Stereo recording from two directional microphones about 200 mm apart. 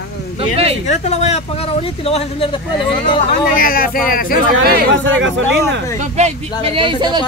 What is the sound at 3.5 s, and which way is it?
Speech, 45° left (ahead or behind).